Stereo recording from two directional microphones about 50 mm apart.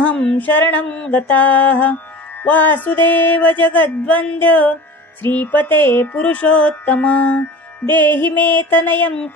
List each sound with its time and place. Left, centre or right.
0.3 s music: left
0.8 s mantra: centre
1.1 s music: left